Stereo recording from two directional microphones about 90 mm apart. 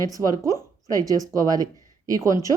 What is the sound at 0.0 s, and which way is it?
Speech, 40° right (ahead or behind).